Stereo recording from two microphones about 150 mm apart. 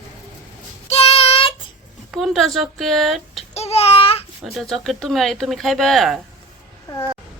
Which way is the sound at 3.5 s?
40° left (ahead or behind).